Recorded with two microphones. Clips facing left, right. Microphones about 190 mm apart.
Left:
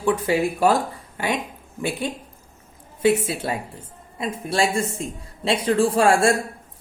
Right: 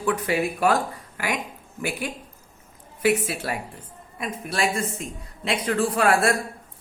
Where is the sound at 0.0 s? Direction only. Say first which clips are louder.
Left 3 dB; 25° left (ahead or behind).